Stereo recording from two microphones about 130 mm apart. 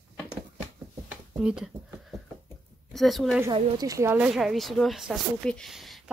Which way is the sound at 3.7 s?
25° right (ahead or behind).